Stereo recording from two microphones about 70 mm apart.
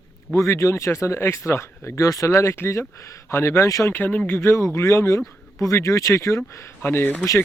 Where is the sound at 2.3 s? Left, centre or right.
Left.